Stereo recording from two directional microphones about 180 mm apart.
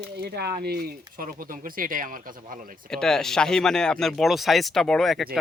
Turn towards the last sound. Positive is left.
turn(degrees=0)  # may be behind; listen again after turning